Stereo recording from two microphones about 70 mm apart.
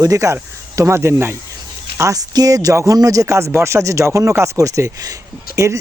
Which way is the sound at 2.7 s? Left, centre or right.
Right.